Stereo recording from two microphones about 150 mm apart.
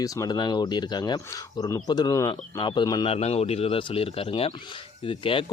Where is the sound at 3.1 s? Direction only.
45° left (ahead or behind).